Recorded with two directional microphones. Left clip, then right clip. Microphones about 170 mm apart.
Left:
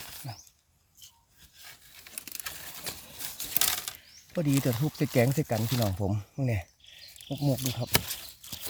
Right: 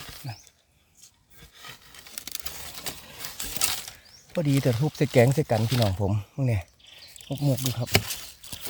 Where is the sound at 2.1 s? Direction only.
40° right (ahead or behind).